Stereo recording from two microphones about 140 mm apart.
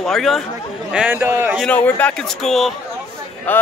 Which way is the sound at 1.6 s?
10° left (ahead or behind).